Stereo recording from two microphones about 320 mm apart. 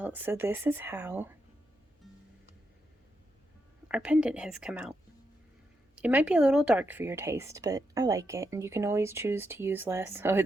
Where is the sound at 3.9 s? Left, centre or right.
Centre.